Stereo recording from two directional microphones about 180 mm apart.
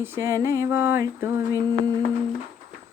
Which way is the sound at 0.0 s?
15° right (ahead or behind).